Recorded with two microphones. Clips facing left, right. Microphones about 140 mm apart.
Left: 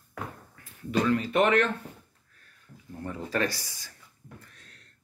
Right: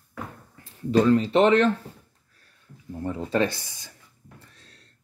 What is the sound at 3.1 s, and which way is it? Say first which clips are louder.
Speech: right 5 dB; 25° right (ahead or behind).